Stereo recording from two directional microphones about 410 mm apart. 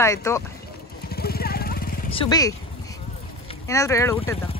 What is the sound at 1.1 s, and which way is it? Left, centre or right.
Vehicle, left.